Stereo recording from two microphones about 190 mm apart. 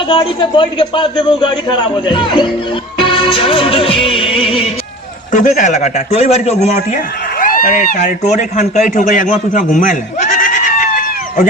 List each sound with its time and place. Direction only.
0.1 s a man's voice: 25° left (ahead or behind)
3.0 s music: 25° left (ahead or behind)
5.3 s a man's voice: 40° left (ahead or behind)